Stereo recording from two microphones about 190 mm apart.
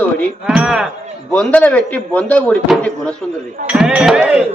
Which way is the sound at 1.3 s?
5° left (ahead or behind).